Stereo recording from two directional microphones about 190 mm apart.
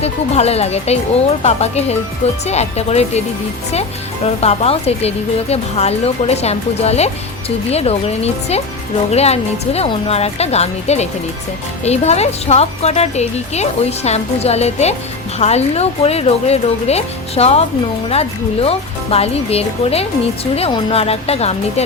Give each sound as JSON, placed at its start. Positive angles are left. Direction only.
{"t": 0.0, "sound": "speech", "side_deg": 35}
{"t": 4.4, "sound": "speech", "side_deg": 30}